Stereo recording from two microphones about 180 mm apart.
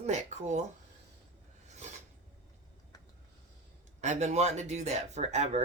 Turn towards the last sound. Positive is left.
turn(degrees=-40)  # may be behind; listen again after turning